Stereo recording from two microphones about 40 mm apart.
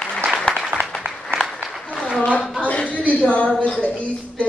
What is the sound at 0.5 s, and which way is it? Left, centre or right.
Applause, left.